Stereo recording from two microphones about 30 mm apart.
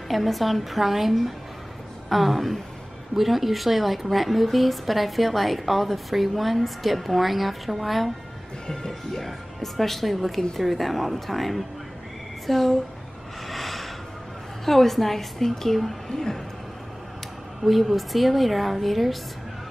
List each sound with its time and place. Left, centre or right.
0.1 s a woman's voice: centre
9.1 s a woman's voice: centre
13.5 s a sound: centre
14.6 s a woman's voice: centre
16.1 s speech: centre
17.6 s a woman's voice: centre